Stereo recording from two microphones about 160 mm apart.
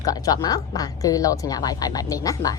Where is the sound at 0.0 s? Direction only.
20° left (ahead or behind).